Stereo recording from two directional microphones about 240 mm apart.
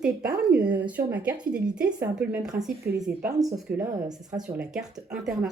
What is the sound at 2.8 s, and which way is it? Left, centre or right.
Speech, right.